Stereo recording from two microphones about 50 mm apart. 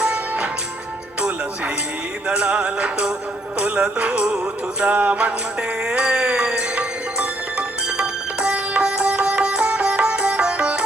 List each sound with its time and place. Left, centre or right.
0.0 s music: right
2.2 s music: right
8.8 s sitar: right